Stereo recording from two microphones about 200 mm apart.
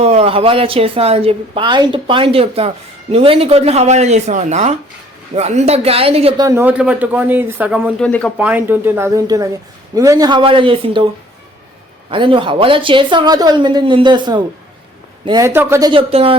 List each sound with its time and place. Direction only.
0.0 s a woman's voice: 30° right (ahead or behind)
6.4 s speech: 15° right (ahead or behind); by 8.3 s 5° left (ahead or behind)
8.4 s speech: 10° right (ahead or behind); by 11.0 s 25° right (ahead or behind)
12.1 s a woman's voice: 25° right (ahead or behind)
15.9 s a woman's voice: 25° right (ahead or behind)